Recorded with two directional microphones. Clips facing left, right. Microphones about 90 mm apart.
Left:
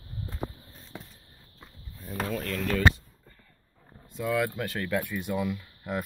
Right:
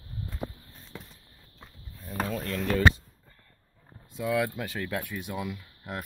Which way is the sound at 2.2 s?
10° right (ahead or behind).